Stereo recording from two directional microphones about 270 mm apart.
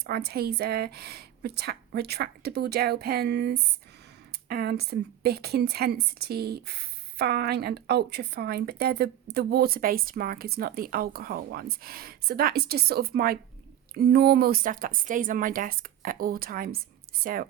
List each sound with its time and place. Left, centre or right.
0.0 s a woman's voice: right